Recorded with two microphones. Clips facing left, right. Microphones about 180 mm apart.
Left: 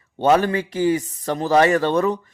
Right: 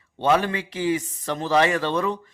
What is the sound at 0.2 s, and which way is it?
A man's voice, 45° left (ahead or behind).